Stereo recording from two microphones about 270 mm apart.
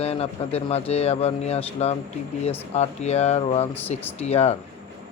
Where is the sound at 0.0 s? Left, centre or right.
Left.